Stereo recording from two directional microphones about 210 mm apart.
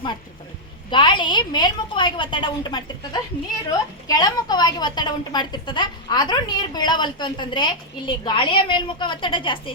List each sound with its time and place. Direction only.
0.9 s a woman's voice: 20° left (ahead or behind)